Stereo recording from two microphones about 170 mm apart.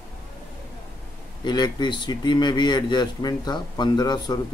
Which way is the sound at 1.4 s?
25° left (ahead or behind).